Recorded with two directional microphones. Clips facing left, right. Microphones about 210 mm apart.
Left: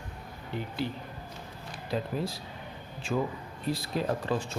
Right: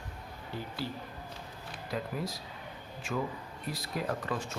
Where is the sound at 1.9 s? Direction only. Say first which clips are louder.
Left 4 dB; 30° left (ahead or behind).